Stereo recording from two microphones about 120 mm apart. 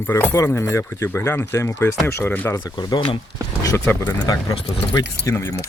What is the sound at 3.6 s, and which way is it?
Speech, 20° left (ahead or behind).